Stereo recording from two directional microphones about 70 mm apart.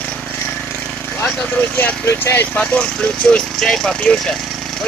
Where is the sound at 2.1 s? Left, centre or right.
Left.